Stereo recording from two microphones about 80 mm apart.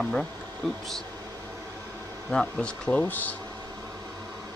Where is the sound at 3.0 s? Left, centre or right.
Left.